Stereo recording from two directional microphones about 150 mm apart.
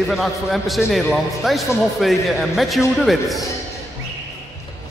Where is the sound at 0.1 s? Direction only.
Centre (ahead or behind).